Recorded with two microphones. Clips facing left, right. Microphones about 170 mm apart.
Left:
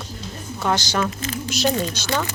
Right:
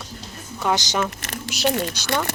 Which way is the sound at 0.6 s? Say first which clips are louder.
Even; 15° right (ahead or behind).